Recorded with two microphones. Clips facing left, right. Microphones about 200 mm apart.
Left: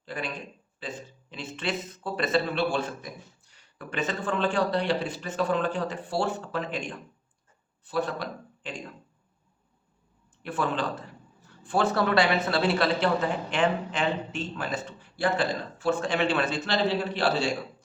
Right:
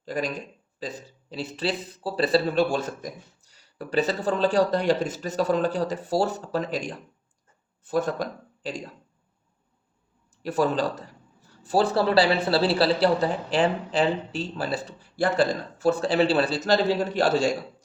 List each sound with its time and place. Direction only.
0.0 s a man's voice: 40° right (ahead or behind)
10.4 s speech: 40° right (ahead or behind)